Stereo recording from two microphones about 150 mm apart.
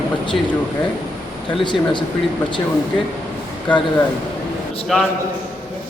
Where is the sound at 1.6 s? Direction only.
30° left (ahead or behind).